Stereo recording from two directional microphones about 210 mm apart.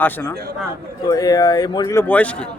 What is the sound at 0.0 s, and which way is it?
A man's voice, 10° left (ahead or behind).